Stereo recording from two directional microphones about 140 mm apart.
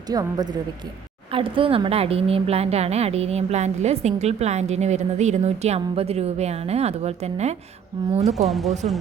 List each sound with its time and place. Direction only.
0.1 s speech: 25° right (ahead or behind)
1.3 s speech: 40° right (ahead or behind)
8.4 s speech: centre (ahead or behind)